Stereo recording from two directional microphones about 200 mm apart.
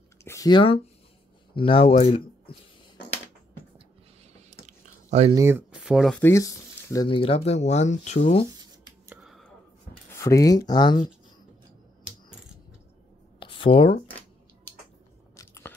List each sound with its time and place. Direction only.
0.2 s speech: 15° left (ahead or behind)
4.6 s chewing: 35° right (ahead or behind)
5.3 s speech: 15° right (ahead or behind); by 8.5 s 35° left (ahead or behind)
9.1 s a sound: centre (ahead or behind)
10.1 s speech: 15° left (ahead or behind)
13.4 s a sound: 25° left (ahead or behind)
15.3 s biting: 15° left (ahead or behind)